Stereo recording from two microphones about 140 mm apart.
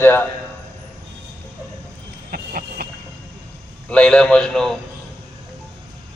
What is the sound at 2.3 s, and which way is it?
Vehicle, 90° right.